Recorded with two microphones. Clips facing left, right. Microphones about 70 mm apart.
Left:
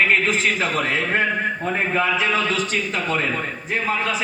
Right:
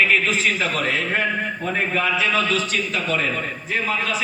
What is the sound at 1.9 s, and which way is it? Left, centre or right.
A man's voice, left.